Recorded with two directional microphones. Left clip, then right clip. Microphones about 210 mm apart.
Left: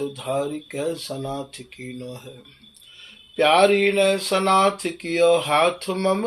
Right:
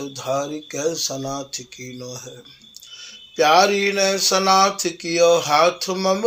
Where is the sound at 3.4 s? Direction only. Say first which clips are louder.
Right 1 dB; 25° right (ahead or behind).